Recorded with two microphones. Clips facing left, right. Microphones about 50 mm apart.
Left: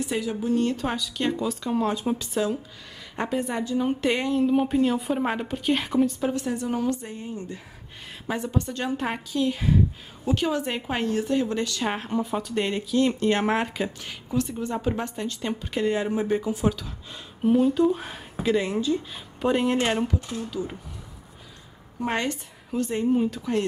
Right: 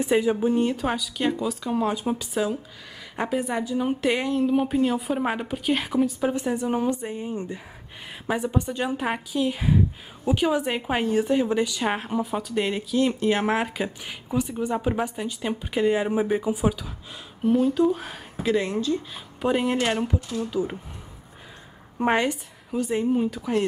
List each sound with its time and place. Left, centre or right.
0.0 s a woman's voice: right
0.7 s a woman's voice: centre
6.3 s a woman's voice: centre
17.4 s a woman's voice: centre
20.2 s speech: left
22.1 s a woman's voice: centre